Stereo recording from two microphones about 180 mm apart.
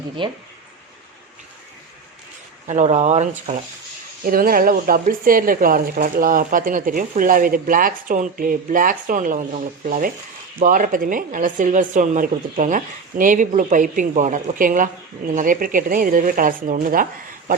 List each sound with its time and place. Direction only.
0.2 s speech: 30° right (ahead or behind)
2.6 s speech: 40° right (ahead or behind)
4.2 s speech: 55° right (ahead or behind)